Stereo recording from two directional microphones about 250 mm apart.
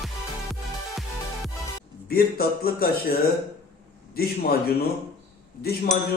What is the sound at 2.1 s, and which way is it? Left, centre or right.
A man's voice, left.